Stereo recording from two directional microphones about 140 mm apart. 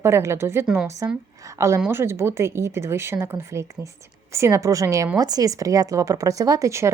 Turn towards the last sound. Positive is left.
turn(degrees=-20)  # may be behind; listen again after turning